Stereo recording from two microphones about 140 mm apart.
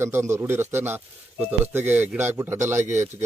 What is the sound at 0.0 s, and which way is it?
Speech, 15° right (ahead or behind).